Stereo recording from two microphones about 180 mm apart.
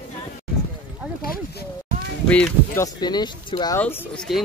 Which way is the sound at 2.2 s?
5° left (ahead or behind).